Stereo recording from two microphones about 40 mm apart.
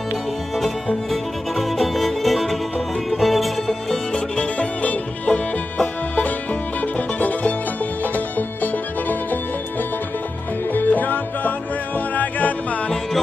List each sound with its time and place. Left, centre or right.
1.1 s music: centre
4.1 s music: left
4.8 s music: left
6.8 s music: left
10.7 s music: left